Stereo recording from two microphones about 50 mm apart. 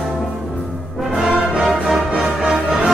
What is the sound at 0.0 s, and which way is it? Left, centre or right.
Music, centre.